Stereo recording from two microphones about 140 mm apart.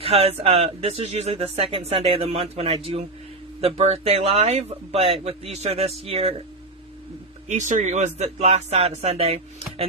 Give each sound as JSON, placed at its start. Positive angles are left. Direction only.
{"t": 0.0, "sound": "speech", "side_deg": -45}
{"t": 7.4, "sound": "speech", "side_deg": -60}